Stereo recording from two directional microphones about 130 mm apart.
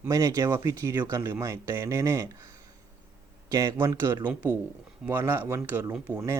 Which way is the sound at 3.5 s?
25° right (ahead or behind).